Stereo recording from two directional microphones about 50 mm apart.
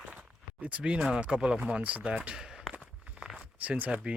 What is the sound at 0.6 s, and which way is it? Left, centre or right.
Speech, right.